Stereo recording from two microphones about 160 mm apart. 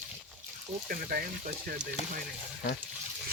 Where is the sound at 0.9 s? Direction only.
65° right (ahead or behind).